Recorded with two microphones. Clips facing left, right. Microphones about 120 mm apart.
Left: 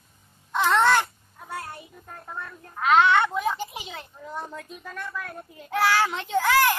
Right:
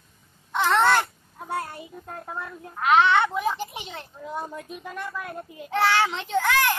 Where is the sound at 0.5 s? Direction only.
Centre (ahead or behind).